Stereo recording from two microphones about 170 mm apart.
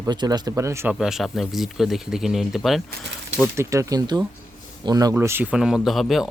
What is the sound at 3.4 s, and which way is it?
Speech, 15° right (ahead or behind).